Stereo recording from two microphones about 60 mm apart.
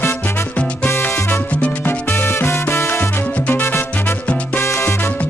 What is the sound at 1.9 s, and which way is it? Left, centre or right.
Salsa music, left.